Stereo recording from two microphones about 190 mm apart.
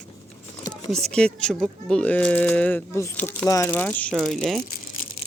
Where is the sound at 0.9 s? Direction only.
5° left (ahead or behind).